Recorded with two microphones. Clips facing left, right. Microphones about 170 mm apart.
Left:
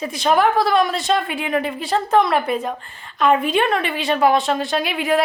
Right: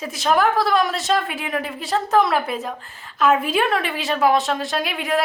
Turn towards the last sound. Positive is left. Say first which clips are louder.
# left 3 dB
turn(degrees=0)  # may be behind; listen again after turning